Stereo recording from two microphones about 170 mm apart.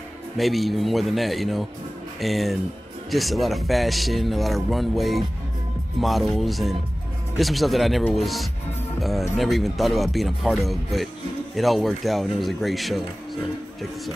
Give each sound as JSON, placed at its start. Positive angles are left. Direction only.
{"t": 0.4, "sound": "a man's voice", "side_deg": 0}